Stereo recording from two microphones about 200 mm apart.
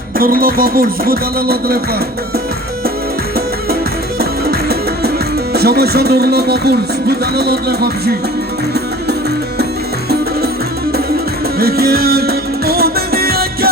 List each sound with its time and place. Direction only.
0.2 s speech: 45° right (ahead or behind)
4.2 s music: 50° right (ahead or behind)
5.5 s speech: 50° right (ahead or behind)
11.6 s music: 50° right (ahead or behind)